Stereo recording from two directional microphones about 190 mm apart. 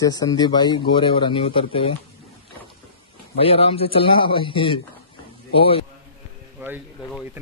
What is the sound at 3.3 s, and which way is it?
Speech, 30° left (ahead or behind).